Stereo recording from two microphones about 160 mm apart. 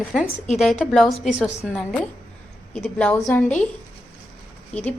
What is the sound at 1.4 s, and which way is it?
Speech, 45° left (ahead or behind).